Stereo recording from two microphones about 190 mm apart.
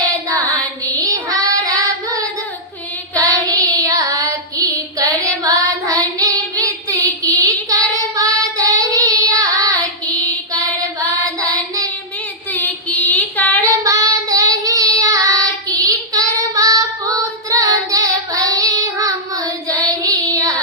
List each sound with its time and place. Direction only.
1.0 s child singing: 20° right (ahead or behind)
7.0 s child singing: 20° right (ahead or behind)
11.3 s child singing: 20° right (ahead or behind)
12.5 s child singing: 10° left (ahead or behind)
13.6 s child singing: 15° right (ahead or behind)